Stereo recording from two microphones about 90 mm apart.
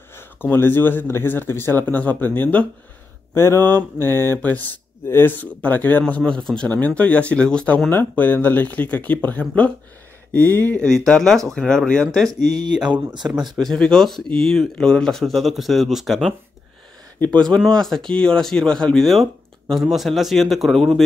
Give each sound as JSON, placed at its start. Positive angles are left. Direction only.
{"t": 0.1, "sound": "speech", "side_deg": 25}
{"t": 3.3, "sound": "speech", "side_deg": 30}
{"t": 12.7, "sound": "speech", "side_deg": -10}
{"t": 13.6, "sound": "speech", "side_deg": 5}
{"t": 17.2, "sound": "speech", "side_deg": 10}